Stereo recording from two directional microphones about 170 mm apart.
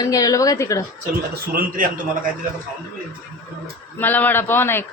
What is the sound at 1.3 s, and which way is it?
Speech, 55° right (ahead or behind).